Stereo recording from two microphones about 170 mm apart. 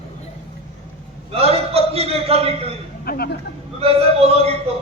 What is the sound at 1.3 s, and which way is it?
A man's voice, 35° right (ahead or behind).